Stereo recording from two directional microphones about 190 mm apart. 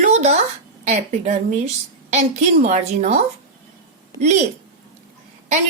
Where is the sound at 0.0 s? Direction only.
35° right (ahead or behind).